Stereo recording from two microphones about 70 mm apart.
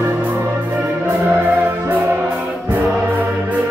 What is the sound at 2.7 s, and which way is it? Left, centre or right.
Choir, right.